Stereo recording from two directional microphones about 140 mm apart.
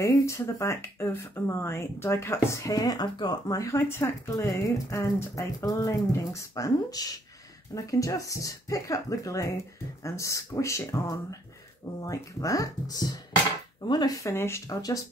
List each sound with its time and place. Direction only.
0.0 s speech: 20° left (ahead or behind)